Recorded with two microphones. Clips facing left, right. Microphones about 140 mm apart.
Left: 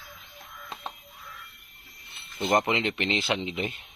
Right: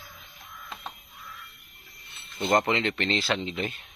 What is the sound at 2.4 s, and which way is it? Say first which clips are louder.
Speech: right 1 dB; 15° left (ahead or behind).